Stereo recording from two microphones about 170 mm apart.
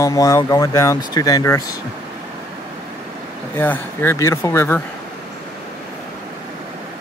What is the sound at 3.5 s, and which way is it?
Speech, 10° left (ahead or behind).